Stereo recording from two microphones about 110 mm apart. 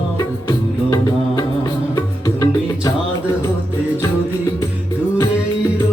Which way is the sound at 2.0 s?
30° left (ahead or behind).